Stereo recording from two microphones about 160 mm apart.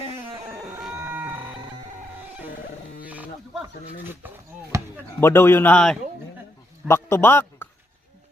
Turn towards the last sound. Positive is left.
turn(degrees=15)  # may be behind; listen again after turning